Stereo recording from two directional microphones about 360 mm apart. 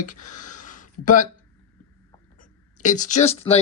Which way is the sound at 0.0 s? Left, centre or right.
Left.